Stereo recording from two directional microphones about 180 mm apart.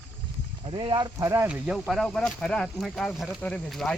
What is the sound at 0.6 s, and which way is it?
Speech, 30° right (ahead or behind).